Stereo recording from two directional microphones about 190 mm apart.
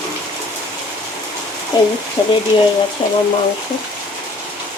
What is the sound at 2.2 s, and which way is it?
Frying, 20° left (ahead or behind).